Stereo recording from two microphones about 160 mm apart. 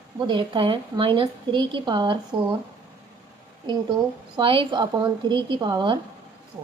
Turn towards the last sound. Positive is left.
turn(degrees=-30)  # may be behind; listen again after turning